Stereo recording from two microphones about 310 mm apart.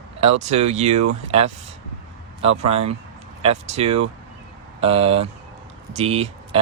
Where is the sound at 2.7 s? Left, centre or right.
Right.